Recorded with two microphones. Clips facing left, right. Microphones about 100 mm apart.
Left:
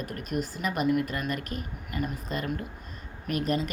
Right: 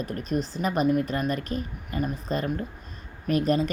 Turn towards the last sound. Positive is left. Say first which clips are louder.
# right 5 dB
turn(degrees=-35)  # may be behind; listen again after turning